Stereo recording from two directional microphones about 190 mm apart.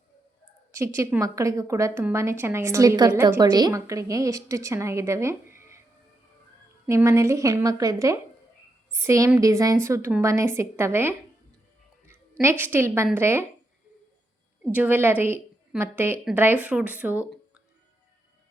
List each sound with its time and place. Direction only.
0.9 s a woman's voice: 15° right (ahead or behind)
6.8 s a woman's voice: 15° right (ahead or behind)
12.4 s a woman's voice: 10° right (ahead or behind)
14.6 s a woman's voice: 10° right (ahead or behind)